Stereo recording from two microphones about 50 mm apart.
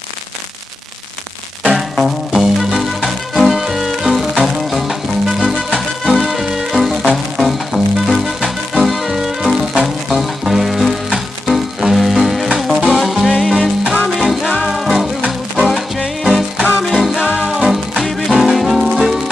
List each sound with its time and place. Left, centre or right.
1.8 s music: centre
16.2 s music: centre